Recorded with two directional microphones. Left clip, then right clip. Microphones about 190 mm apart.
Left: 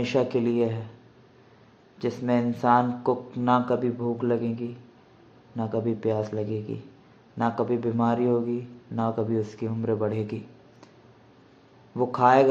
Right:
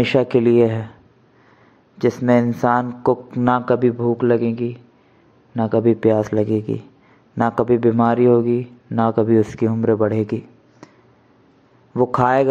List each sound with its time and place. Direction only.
0.0 s a man's voice: 35° right (ahead or behind)
2.0 s a man's voice: 40° right (ahead or behind)
11.9 s a man's voice: 40° right (ahead or behind)